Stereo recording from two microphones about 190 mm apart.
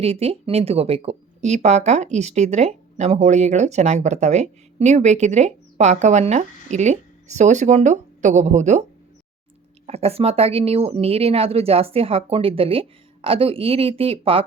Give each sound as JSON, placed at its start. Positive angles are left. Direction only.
{"t": 0.0, "sound": "speech", "side_deg": -30}
{"t": 9.8, "sound": "speech", "side_deg": -35}